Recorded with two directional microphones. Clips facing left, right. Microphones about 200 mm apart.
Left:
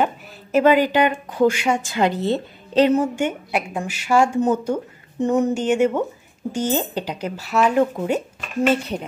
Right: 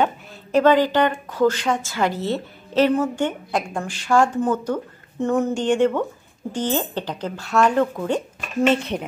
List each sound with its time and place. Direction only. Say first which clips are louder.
0.0 s a woman's voice: even; 5° left (ahead or behind)
8.6 s speech: even; centre (ahead or behind)